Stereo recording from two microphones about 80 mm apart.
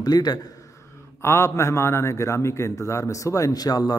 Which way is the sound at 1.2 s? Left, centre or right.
Left.